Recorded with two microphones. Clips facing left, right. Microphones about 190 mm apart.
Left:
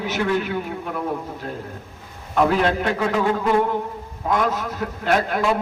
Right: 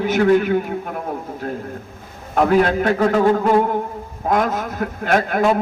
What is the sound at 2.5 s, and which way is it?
A man's voice, 45° right (ahead or behind).